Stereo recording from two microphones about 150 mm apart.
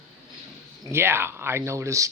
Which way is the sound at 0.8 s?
15° right (ahead or behind).